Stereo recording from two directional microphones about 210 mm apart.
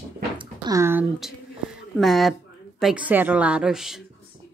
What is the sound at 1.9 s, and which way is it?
A woman's voice, centre (ahead or behind).